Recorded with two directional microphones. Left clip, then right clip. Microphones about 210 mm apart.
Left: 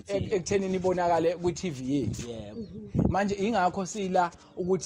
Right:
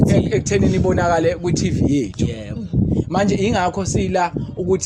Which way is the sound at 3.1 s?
10° left (ahead or behind).